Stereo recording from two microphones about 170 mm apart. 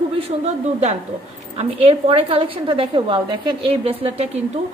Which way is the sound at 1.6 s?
35° right (ahead or behind).